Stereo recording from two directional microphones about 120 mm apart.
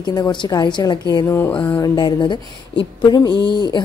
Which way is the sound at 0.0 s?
35° left (ahead or behind).